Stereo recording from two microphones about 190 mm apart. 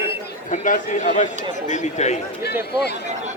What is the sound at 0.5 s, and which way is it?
A man's voice, 40° left (ahead or behind).